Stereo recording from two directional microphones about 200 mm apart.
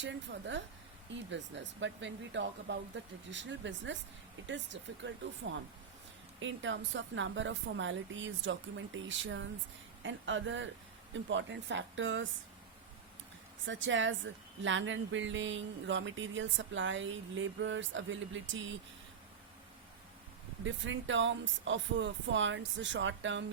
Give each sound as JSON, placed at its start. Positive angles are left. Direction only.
{"t": 0.0, "sound": "speech", "side_deg": -65}
{"t": 13.7, "sound": "speech", "side_deg": -70}
{"t": 20.7, "sound": "speech", "side_deg": -70}